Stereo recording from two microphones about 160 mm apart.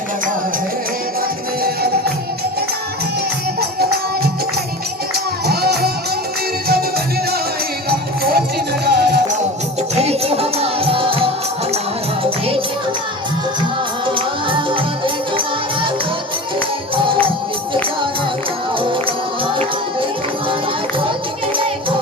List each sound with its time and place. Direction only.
1.6 s music: 75° right (ahead or behind)
3.6 s music: 75° right (ahead or behind)
5.5 s music: 75° right (ahead or behind)
7.9 s music: 75° right (ahead or behind)
10.0 s music: 40° right (ahead or behind)
14.2 s music: 30° right (ahead or behind)
16.9 s music: 30° right (ahead or behind)
18.8 s music: 30° right (ahead or behind)